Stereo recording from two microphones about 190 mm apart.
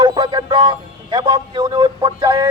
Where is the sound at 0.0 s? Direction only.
20° right (ahead or behind).